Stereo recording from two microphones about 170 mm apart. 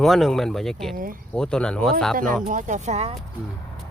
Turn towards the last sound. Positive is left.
turn(degrees=-40)  # may be behind; listen again after turning